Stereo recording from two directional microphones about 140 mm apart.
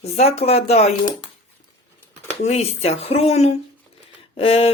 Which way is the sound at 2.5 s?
50° left (ahead or behind).